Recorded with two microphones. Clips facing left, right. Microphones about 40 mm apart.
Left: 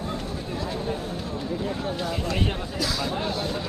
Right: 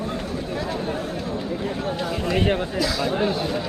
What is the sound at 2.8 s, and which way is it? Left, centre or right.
Speech, centre.